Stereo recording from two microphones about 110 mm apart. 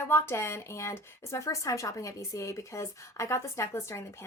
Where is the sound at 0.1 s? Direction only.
25° left (ahead or behind).